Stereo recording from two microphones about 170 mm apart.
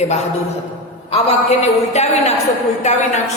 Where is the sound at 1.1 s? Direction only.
40° left (ahead or behind).